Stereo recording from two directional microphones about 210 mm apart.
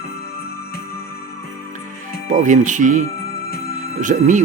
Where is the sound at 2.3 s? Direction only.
35° right (ahead or behind).